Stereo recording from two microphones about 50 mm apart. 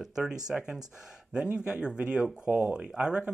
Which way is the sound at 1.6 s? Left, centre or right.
Right.